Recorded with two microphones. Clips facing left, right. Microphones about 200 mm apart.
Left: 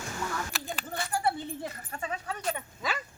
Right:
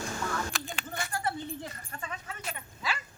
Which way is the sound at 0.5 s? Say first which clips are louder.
Right 1 dB; 5° left (ahead or behind).